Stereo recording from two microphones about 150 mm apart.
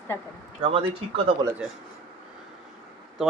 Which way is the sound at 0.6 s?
35° right (ahead or behind).